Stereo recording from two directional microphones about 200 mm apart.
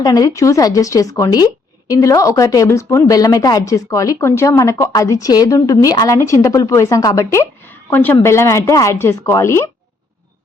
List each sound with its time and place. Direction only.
0.0 s a woman's voice: 20° left (ahead or behind)